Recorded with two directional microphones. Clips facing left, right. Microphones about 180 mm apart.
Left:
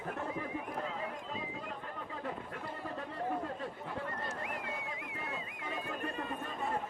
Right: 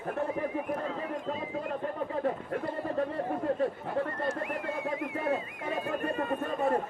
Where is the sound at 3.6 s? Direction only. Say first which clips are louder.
Right 11 dB; 60° right (ahead or behind).